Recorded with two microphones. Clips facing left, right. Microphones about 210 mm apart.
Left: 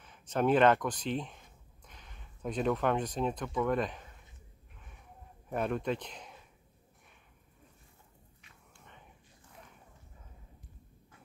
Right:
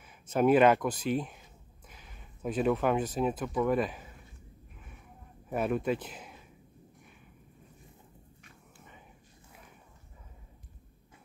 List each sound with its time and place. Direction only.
0.0 s speech: 10° right (ahead or behind)
5.5 s speech: 5° right (ahead or behind)